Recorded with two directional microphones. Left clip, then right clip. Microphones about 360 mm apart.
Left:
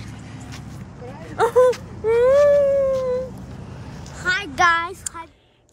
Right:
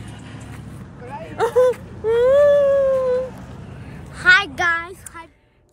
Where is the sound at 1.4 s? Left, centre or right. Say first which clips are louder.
Left 1 dB; centre.